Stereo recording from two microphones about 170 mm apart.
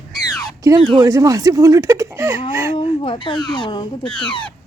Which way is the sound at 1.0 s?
20° right (ahead or behind).